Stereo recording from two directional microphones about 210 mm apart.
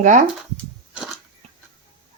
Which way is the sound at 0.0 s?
35° right (ahead or behind).